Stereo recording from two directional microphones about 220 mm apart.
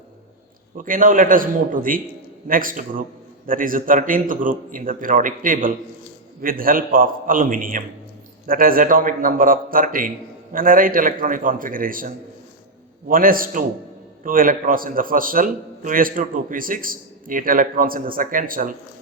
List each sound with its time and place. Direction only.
0.8 s a man's voice: 40° right (ahead or behind)